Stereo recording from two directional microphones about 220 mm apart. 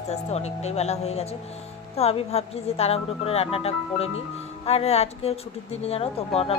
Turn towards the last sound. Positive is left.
turn(degrees=25)  # may be behind; listen again after turning